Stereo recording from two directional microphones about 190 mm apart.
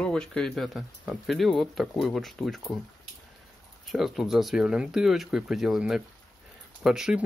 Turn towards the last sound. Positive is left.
turn(degrees=0)  # may be behind; listen again after turning